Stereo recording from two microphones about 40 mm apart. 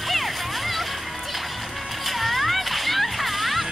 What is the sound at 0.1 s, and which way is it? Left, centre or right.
Music, centre.